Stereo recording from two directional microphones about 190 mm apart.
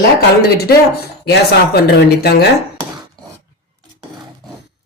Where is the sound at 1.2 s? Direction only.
60° left (ahead or behind).